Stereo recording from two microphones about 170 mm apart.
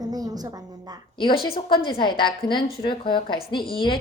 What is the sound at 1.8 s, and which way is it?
Speech, 30° left (ahead or behind).